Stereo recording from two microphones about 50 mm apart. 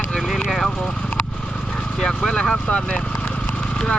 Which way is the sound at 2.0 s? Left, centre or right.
Centre.